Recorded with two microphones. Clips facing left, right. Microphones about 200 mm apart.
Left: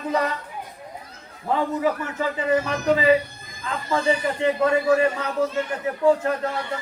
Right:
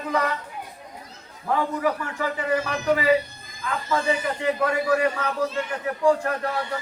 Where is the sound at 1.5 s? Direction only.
20° left (ahead or behind).